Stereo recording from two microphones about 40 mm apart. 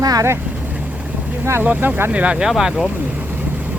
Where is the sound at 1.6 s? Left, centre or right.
Right.